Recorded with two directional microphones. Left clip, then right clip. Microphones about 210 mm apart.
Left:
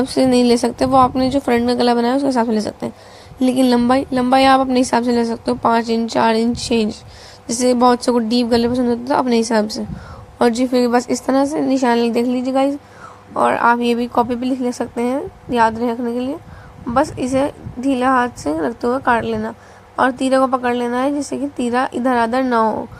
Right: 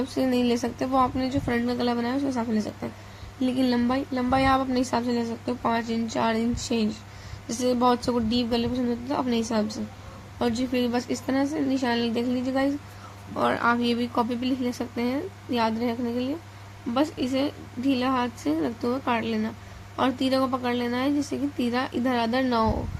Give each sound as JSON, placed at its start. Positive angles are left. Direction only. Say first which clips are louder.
{"t": 0.0, "sound": "a woman's voice", "louder": "left 11 dB", "side_deg": 35}
{"t": 18.0, "sound": "speech", "louder": "left 10 dB", "side_deg": 20}